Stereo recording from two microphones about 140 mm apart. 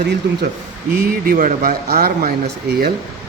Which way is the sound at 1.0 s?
90° right.